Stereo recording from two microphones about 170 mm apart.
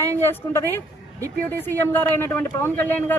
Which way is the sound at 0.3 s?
15° left (ahead or behind).